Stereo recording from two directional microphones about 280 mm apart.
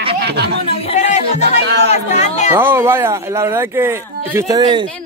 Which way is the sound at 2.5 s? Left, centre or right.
Centre.